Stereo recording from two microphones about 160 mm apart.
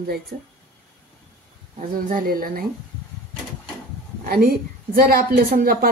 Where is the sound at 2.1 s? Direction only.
60° right (ahead or behind).